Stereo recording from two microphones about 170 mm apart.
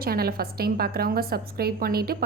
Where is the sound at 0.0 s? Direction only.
65° right (ahead or behind).